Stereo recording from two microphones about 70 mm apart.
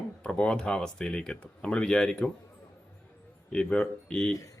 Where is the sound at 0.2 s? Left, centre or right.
Centre.